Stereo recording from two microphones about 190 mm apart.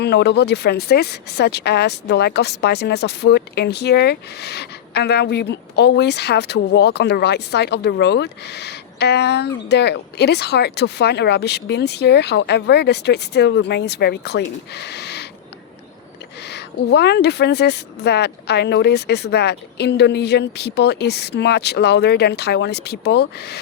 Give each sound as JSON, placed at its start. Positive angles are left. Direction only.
{"t": 0.0, "sound": "speech", "side_deg": 60}
{"t": 16.4, "sound": "speech", "side_deg": 60}